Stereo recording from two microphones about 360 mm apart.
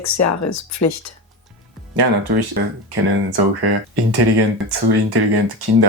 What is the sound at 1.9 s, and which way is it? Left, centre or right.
Speech, right.